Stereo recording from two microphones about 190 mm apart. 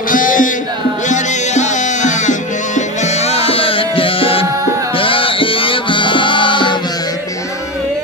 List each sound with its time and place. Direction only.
0.1 s music: 45° left (ahead or behind); by 6.8 s 25° left (ahead or behind)